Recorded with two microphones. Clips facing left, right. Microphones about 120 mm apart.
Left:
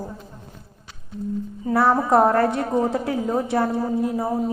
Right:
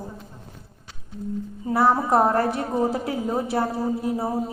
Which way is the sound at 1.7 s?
25° right (ahead or behind).